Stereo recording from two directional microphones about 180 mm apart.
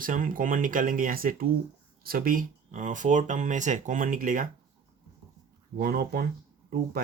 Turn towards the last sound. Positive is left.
turn(degrees=-60)  # may be behind; listen again after turning